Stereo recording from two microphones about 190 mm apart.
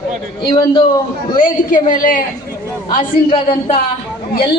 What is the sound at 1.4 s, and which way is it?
Speech, 45° left (ahead or behind).